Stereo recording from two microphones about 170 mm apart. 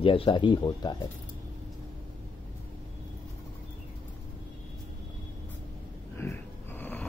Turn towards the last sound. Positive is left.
turn(degrees=10)  # may be behind; listen again after turning